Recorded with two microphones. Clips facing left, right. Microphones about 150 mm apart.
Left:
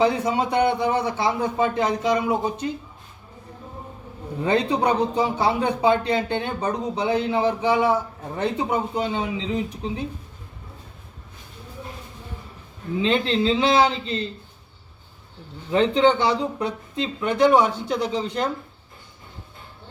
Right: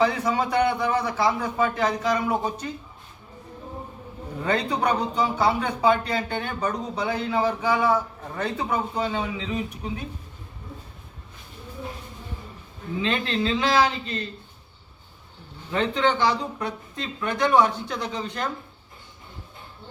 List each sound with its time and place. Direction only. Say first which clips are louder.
0.0 s a man's voice: left 2 dB; 25° left (ahead or behind)
4.4 s a man's voice: left 3 dB; 25° left (ahead or behind)
13.0 s a man's voice: left 4 dB; 25° left (ahead or behind)
15.7 s a man's voice: left 5 dB; 25° left (ahead or behind)